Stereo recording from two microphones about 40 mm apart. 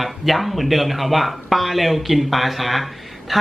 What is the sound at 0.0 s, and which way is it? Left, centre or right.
A man's voice, centre.